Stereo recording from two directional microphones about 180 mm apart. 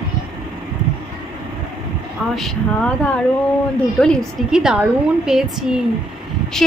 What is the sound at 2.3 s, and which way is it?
A woman's voice, 5° left (ahead or behind).